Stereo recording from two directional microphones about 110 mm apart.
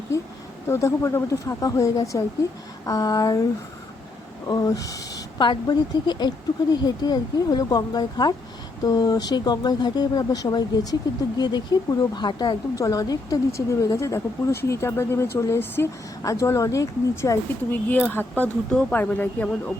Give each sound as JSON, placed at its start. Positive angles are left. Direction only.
{"t": 0.7, "sound": "a woman's voice", "side_deg": 25}
{"t": 4.4, "sound": "speech", "side_deg": 30}
{"t": 5.4, "sound": "a woman's voice", "side_deg": 45}
{"t": 17.7, "sound": "speech", "side_deg": 15}